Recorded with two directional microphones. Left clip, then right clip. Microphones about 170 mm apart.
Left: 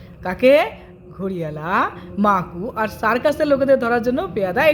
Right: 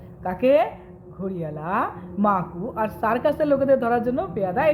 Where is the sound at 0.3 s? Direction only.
20° left (ahead or behind).